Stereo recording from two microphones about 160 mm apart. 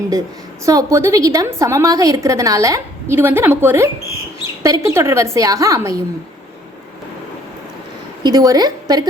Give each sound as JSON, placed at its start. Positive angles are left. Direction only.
{"t": 0.6, "sound": "a woman's voice", "side_deg": -20}
{"t": 8.2, "sound": "a woman's voice", "side_deg": -25}